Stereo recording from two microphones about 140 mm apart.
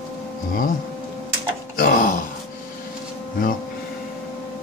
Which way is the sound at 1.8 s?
75° left (ahead or behind).